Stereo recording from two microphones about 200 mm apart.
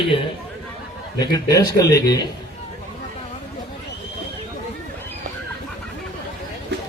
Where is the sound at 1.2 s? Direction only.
20° left (ahead or behind).